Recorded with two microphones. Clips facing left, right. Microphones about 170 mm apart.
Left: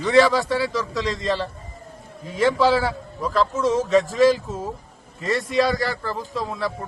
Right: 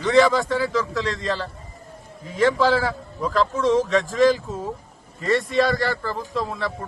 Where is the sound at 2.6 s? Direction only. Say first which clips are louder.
Left 1 dB; 5° left (ahead or behind).